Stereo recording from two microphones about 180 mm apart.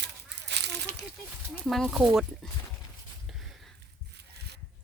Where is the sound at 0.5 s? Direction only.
70° right (ahead or behind).